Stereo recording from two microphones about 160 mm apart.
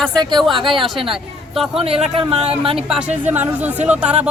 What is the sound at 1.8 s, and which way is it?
Speech, 35° right (ahead or behind).